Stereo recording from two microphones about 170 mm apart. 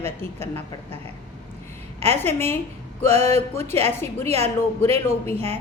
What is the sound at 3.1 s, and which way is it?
Speech, 40° right (ahead or behind).